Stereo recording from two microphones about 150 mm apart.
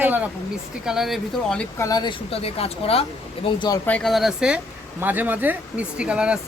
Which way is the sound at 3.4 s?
30° left (ahead or behind).